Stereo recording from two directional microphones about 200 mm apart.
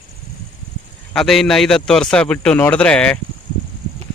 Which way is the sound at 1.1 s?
Centre (ahead or behind).